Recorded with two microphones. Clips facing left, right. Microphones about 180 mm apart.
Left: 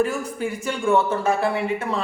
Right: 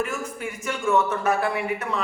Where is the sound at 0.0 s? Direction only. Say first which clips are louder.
Left 6 dB; 35° left (ahead or behind).